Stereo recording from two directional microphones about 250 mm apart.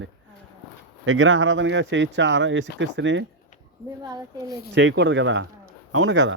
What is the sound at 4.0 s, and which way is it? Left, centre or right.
Speech, centre.